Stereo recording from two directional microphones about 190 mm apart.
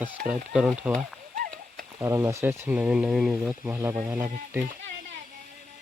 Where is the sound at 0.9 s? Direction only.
45° right (ahead or behind).